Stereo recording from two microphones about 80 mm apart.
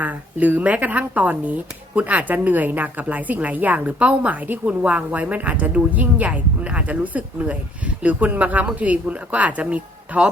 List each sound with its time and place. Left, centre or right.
0.0 s a woman's voice: right